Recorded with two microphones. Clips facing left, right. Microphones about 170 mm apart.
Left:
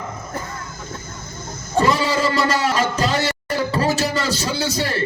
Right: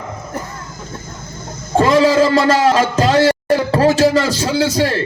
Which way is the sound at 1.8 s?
90° right.